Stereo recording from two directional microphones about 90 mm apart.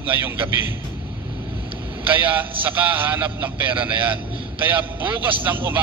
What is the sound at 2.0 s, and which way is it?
A man's voice, 20° right (ahead or behind).